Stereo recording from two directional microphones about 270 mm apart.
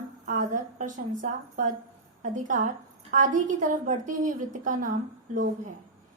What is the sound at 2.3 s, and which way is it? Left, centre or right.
A woman's voice, right.